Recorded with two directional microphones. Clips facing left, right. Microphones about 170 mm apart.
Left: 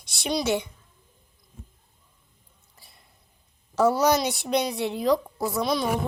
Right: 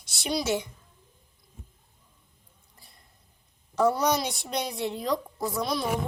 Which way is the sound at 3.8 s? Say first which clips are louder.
Left 3 dB; 5° left (ahead or behind).